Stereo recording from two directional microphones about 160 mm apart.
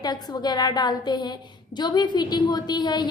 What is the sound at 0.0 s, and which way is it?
A woman's voice, 25° left (ahead or behind).